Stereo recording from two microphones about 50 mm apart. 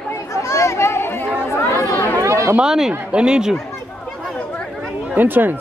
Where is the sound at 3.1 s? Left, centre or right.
Centre.